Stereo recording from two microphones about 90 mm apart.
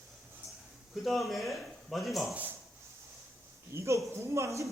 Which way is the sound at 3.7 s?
30° right (ahead or behind).